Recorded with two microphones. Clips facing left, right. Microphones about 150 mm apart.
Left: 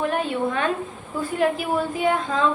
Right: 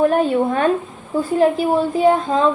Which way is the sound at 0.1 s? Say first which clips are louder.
Right 7 dB; 40° right (ahead or behind).